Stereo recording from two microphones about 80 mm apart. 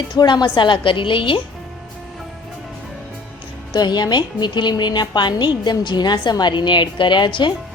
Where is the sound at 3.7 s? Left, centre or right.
Left.